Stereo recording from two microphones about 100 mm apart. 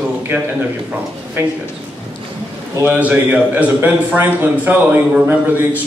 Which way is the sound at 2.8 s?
20° right (ahead or behind).